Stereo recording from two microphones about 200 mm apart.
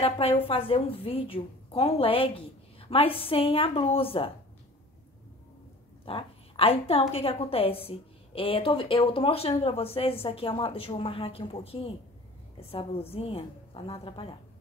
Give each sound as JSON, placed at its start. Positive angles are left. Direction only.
{"t": 0.0, "sound": "a woman's voice", "side_deg": 30}
{"t": 6.0, "sound": "a woman's voice", "side_deg": 25}